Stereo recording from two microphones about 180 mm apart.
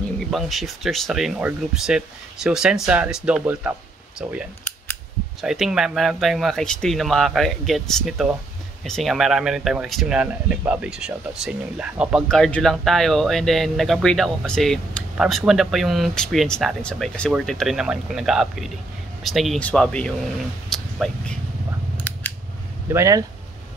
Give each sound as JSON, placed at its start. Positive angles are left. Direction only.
{"t": 0.3, "sound": "speech", "side_deg": 0}
{"t": 20.7, "sound": "a sound", "side_deg": 5}
{"t": 22.9, "sound": "speech", "side_deg": -15}